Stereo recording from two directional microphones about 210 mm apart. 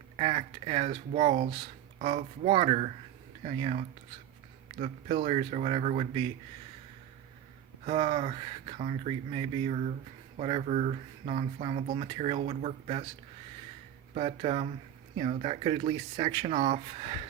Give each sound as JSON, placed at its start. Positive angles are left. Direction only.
{"t": 0.2, "sound": "speech", "side_deg": -30}
{"t": 7.9, "sound": "speech", "side_deg": -25}
{"t": 14.1, "sound": "speech", "side_deg": -30}